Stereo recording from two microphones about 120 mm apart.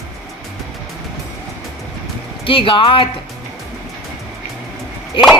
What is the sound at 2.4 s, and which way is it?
Speech, 45° left (ahead or behind).